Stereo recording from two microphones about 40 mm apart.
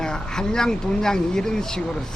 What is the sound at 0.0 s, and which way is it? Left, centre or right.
A woman's voice, centre.